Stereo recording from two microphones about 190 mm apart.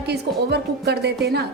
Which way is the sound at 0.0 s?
60° right (ahead or behind).